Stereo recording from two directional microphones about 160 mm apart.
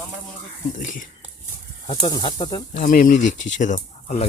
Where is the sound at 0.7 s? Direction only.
55° left (ahead or behind).